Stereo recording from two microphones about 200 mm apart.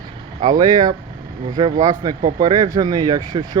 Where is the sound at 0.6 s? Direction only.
20° right (ahead or behind).